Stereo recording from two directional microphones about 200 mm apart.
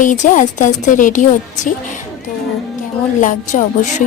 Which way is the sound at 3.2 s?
40° left (ahead or behind).